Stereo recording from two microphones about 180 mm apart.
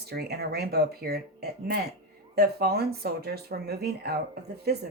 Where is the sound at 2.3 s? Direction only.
60° right (ahead or behind).